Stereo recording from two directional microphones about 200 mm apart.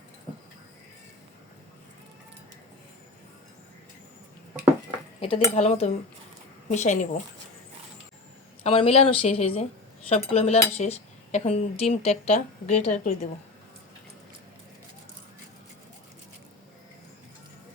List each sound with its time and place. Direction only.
5.2 s speech: 30° left (ahead or behind)
8.6 s speech: 30° left (ahead or behind)